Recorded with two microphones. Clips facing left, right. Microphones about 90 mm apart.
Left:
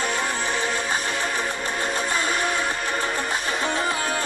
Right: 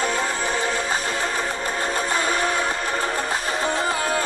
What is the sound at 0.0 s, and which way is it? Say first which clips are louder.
Music: right 2 dB; 35° right (ahead or behind).